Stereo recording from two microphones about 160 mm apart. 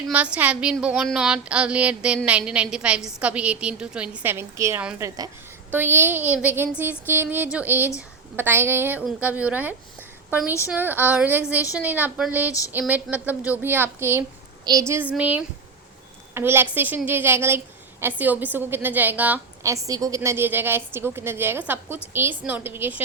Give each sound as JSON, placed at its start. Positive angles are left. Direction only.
{"t": 0.1, "sound": "a woman's voice", "side_deg": -10}
{"t": 12.5, "sound": "speech", "side_deg": 20}
{"t": 12.9, "sound": "a woman's voice", "side_deg": -10}